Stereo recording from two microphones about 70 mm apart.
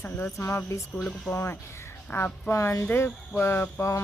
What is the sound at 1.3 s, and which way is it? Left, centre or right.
Speech, left.